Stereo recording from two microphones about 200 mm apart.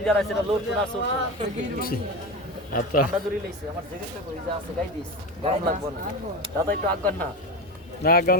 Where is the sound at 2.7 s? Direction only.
45° left (ahead or behind).